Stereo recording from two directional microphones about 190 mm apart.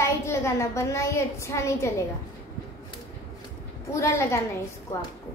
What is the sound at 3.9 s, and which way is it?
Speech, 15° left (ahead or behind).